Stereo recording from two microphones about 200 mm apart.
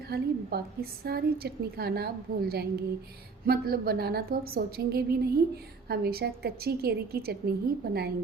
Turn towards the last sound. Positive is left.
turn(degrees=-50)  # may be behind; listen again after turning